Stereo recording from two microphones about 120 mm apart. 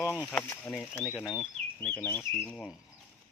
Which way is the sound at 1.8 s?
15° left (ahead or behind).